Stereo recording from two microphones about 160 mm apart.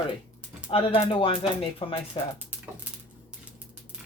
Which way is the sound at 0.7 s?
35° left (ahead or behind).